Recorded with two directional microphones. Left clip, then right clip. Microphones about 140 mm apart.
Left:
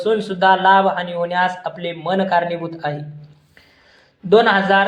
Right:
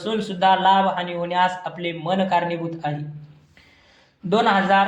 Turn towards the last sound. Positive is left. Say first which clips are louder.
# left 3 dB
turn(degrees=5)  # may be behind; listen again after turning